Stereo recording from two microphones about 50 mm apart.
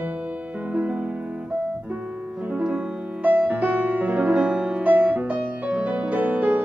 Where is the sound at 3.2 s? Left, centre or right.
Right.